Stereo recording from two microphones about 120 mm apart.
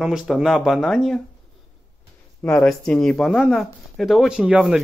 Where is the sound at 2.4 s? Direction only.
10° left (ahead or behind).